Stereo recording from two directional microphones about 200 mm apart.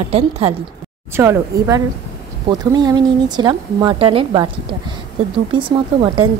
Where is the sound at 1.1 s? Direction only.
15° right (ahead or behind).